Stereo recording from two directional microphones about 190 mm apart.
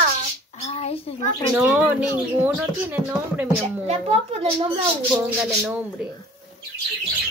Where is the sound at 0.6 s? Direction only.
35° left (ahead or behind).